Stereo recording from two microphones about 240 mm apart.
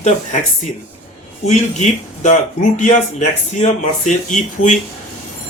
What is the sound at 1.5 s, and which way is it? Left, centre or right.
Speech, left.